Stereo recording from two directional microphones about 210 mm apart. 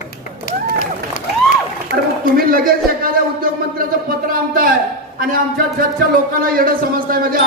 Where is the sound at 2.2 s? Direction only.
45° right (ahead or behind).